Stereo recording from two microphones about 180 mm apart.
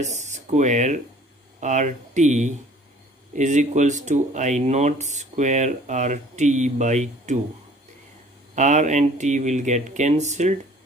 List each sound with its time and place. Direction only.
0.0 s speech: 40° right (ahead or behind)
8.5 s speech: 40° right (ahead or behind)